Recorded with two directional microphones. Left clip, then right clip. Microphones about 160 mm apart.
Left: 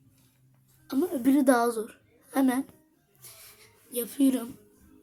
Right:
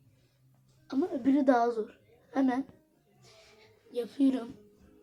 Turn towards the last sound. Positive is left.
turn(degrees=25)  # may be behind; listen again after turning